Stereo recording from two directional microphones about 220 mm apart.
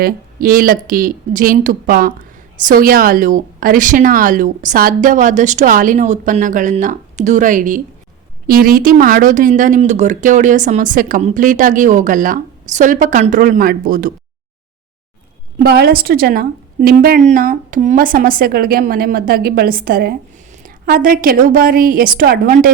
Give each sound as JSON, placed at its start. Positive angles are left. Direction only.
{"t": 0.0, "sound": "a woman's voice", "side_deg": -40}
{"t": 15.6, "sound": "a woman's voice", "side_deg": -45}